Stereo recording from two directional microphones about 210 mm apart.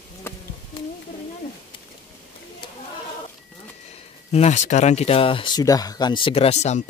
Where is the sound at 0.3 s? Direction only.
10° left (ahead or behind).